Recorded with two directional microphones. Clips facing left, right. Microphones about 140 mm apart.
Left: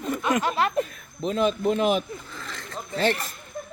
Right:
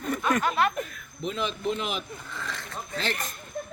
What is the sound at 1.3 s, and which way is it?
Speech, 40° left (ahead or behind).